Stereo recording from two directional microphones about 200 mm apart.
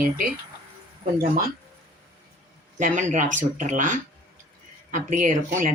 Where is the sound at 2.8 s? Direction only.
40° right (ahead or behind).